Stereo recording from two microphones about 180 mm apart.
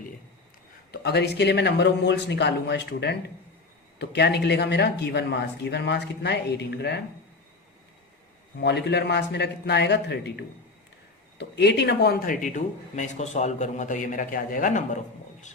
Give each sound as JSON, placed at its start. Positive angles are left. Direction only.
{"t": 0.9, "sound": "speech", "side_deg": 65}
{"t": 8.6, "sound": "speech", "side_deg": 70}